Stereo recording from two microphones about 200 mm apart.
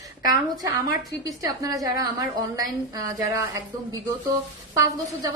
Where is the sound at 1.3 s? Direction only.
15° right (ahead or behind).